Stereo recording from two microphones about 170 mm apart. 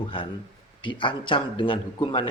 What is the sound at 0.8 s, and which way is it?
A man's voice, 30° left (ahead or behind).